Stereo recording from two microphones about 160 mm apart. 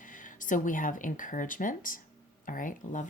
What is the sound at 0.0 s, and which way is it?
Speech, 55° left (ahead or behind).